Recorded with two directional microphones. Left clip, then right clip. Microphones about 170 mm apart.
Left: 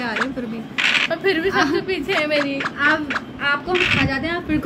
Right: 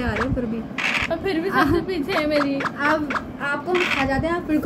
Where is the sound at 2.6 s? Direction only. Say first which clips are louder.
Left 2 dB; 45° right (ahead or behind).